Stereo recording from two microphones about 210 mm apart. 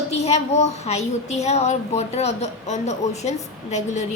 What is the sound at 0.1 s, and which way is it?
A woman's voice, 30° left (ahead or behind).